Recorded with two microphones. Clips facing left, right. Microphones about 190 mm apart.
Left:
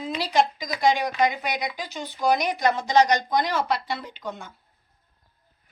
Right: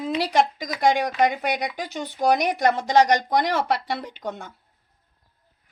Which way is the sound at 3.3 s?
70° right (ahead or behind).